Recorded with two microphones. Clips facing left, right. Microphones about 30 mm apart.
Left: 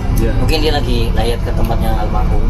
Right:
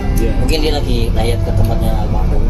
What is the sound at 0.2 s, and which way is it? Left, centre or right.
Speech, centre.